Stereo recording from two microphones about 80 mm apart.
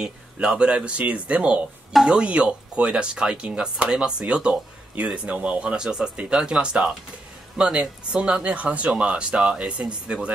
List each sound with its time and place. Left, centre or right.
0.0 s speech: centre